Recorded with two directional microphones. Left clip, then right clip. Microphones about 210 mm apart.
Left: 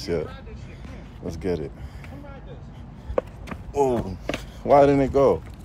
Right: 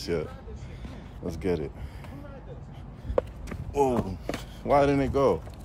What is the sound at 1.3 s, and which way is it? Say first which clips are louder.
Speech: left 2 dB; 15° right (ahead or behind).